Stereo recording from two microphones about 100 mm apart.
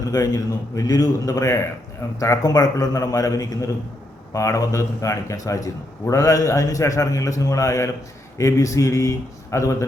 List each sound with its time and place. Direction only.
0.1 s a man's voice: 35° left (ahead or behind)